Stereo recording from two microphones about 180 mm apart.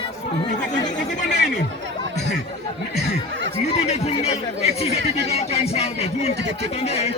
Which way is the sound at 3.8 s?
35° left (ahead or behind).